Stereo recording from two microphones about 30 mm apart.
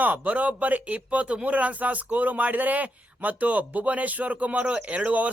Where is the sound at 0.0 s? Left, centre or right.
Right.